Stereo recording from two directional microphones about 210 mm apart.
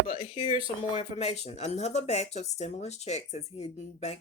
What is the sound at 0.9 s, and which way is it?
Speech, 30° left (ahead or behind).